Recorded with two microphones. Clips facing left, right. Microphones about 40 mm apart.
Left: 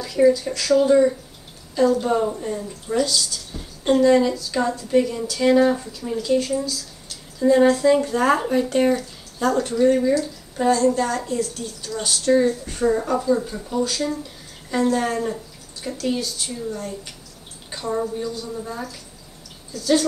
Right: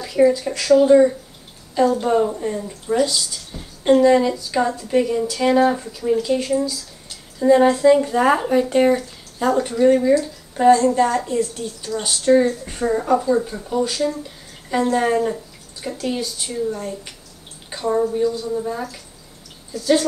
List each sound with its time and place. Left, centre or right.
0.0 s speech: centre